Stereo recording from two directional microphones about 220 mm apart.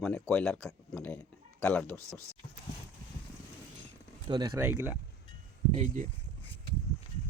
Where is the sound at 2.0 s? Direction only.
15° right (ahead or behind).